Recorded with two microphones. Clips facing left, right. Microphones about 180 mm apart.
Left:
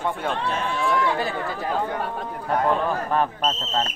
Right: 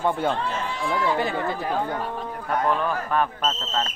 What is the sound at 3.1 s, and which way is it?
Speech, 30° left (ahead or behind).